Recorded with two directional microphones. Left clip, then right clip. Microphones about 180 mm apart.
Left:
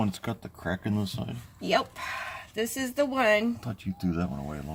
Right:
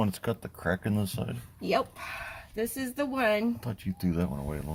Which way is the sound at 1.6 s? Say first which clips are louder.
Left 2 dB; 35° left (ahead or behind).